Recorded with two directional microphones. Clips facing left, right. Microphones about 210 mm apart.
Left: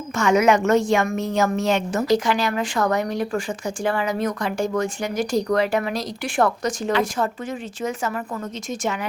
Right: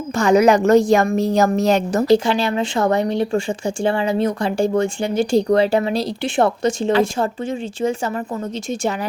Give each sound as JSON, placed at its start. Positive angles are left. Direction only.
{"t": 0.2, "sound": "a woman's voice", "side_deg": -35}